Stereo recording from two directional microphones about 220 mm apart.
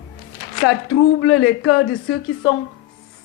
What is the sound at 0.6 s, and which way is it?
A woman's voice, 80° left.